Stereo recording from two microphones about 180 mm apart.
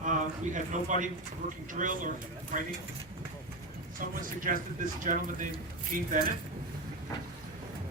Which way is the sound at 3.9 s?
50° right (ahead or behind).